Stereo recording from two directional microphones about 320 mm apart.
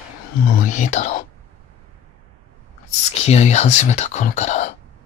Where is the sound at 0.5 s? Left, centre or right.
Left.